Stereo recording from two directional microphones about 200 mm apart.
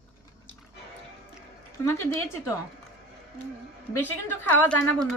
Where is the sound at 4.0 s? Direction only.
10° left (ahead or behind).